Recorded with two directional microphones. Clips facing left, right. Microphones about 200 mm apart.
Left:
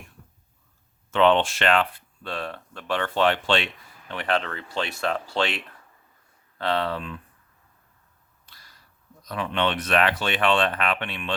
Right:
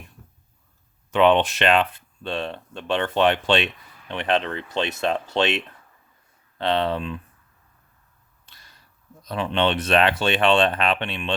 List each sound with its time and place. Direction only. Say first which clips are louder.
1.1 s speech: right 2 dB; 15° right (ahead or behind)
8.4 s a sound: right 1 dB; 25° right (ahead or behind)
9.2 s speech: right 3 dB; 25° right (ahead or behind)